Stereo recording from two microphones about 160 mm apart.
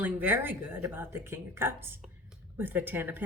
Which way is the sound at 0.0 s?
10° right (ahead or behind).